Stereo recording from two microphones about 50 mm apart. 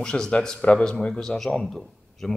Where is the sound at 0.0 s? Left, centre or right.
Centre.